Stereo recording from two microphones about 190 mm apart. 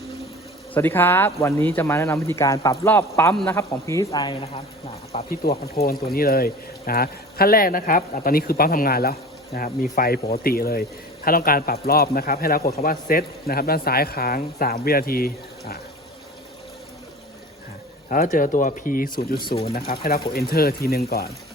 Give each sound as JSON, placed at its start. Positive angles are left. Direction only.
{"t": 0.7, "sound": "a man's voice", "side_deg": 10}
{"t": 5.3, "sound": "speech", "side_deg": 55}
{"t": 9.6, "sound": "speech", "side_deg": 40}
{"t": 18.1, "sound": "speech", "side_deg": 45}
{"t": 19.4, "sound": "speech", "side_deg": 25}
{"t": 20.3, "sound": "speech", "side_deg": 55}